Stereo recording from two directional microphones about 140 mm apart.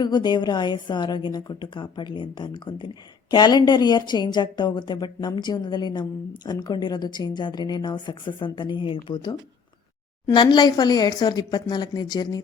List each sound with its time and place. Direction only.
0.0 s a woman's voice: 30° left (ahead or behind)